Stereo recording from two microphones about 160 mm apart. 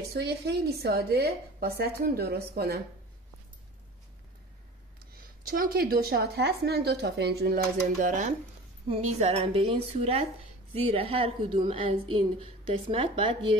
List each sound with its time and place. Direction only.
0.1 s a woman's voice: 90° right; by 2.8 s 75° right (ahead or behind)
5.5 s a woman's voice: 65° right (ahead or behind)
8.8 s a woman's voice: 40° right (ahead or behind)